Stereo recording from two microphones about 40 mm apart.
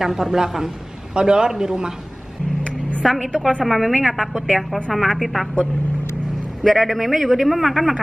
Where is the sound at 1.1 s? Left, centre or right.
Right.